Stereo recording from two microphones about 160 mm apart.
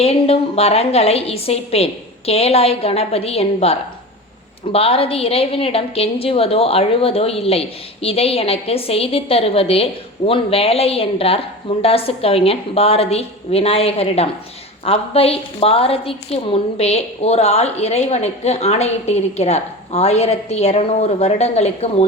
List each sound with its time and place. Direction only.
0.0 s a woman's voice: 40° left (ahead or behind)